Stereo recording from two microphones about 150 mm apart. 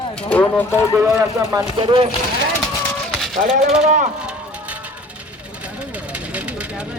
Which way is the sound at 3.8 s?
55° right (ahead or behind).